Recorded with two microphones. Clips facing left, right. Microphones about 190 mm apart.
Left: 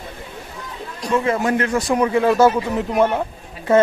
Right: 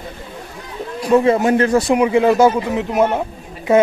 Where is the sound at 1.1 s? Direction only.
25° right (ahead or behind).